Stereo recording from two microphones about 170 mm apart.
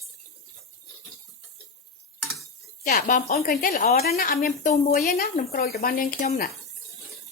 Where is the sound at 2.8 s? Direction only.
50° left (ahead or behind).